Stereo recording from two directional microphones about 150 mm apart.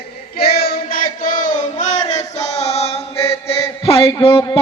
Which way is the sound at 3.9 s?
40° left (ahead or behind).